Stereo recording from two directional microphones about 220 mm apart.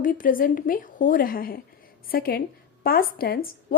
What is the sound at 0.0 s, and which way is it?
A woman's voice, 40° left (ahead or behind).